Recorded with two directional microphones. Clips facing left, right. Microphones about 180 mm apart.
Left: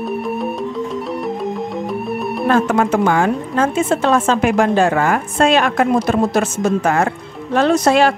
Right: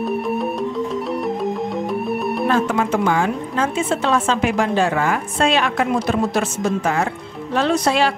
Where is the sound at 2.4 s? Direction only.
50° left (ahead or behind).